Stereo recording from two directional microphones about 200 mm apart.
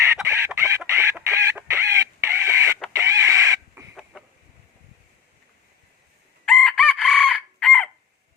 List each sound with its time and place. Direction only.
0.0 s chicken: 15° right (ahead or behind)
3.0 s a sound: 15° right (ahead or behind)
6.4 s chicken: 5° left (ahead or behind)